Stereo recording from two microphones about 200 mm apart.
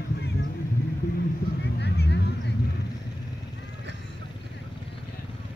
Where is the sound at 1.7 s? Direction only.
55° left (ahead or behind).